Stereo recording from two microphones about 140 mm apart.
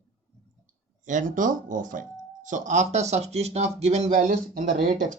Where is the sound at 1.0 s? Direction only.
65° right (ahead or behind).